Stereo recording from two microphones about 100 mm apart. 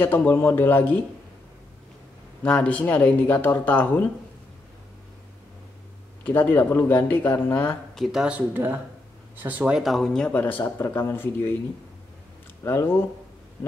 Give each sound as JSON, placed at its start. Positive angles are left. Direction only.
{"t": 0.0, "sound": "speech", "side_deg": 20}
{"t": 2.4, "sound": "speech", "side_deg": 15}
{"t": 6.2, "sound": "speech", "side_deg": 20}
{"t": 7.9, "sound": "speech", "side_deg": -5}
{"t": 9.8, "sound": "speech", "side_deg": 0}
{"t": 12.6, "sound": "speech", "side_deg": 25}